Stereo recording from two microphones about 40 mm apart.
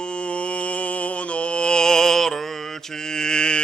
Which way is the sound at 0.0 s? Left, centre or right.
Left.